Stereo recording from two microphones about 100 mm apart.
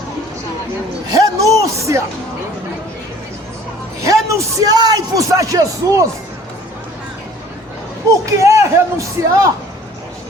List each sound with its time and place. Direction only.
1.1 s speech: 35° right (ahead or behind)
4.0 s a man's voice: 30° right (ahead or behind)
8.3 s a man's voice: 30° right (ahead or behind)